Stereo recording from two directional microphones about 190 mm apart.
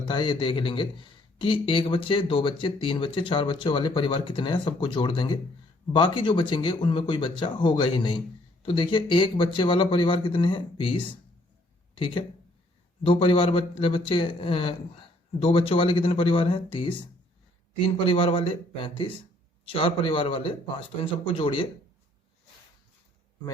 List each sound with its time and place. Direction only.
0.0 s speech: 25° left (ahead or behind)